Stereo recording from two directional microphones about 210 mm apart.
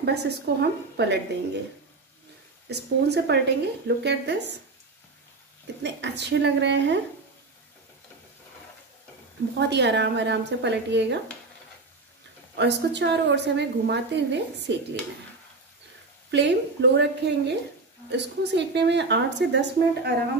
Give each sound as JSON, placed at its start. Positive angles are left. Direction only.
{"t": 0.0, "sound": "a woman's voice", "side_deg": -50}
{"t": 2.7, "sound": "a woman's voice", "side_deg": -50}
{"t": 5.8, "sound": "a woman's voice", "side_deg": -55}
{"t": 9.6, "sound": "a woman's voice", "side_deg": -55}
{"t": 12.5, "sound": "a woman's voice", "side_deg": -55}
{"t": 16.3, "sound": "a woman's voice", "side_deg": -55}